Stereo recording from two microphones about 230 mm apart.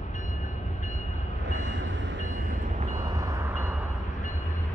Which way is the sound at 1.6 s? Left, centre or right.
Right.